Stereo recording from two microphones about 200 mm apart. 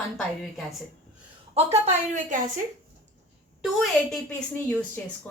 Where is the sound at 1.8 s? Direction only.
40° right (ahead or behind).